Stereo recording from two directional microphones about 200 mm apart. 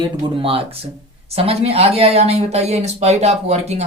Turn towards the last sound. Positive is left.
turn(degrees=-35)  # may be behind; listen again after turning